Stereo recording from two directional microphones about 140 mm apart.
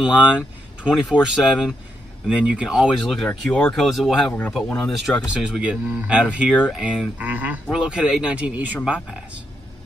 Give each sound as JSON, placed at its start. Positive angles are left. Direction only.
{"t": 0.0, "sound": "speech", "side_deg": -10}
{"t": 3.3, "sound": "speech", "side_deg": 10}
{"t": 4.3, "sound": "speech", "side_deg": 15}
{"t": 5.0, "sound": "speech", "side_deg": -5}